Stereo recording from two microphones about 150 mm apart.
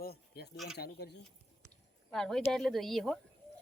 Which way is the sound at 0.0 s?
90° left.